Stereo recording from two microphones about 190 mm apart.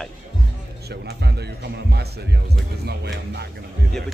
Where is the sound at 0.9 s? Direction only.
60° right (ahead or behind).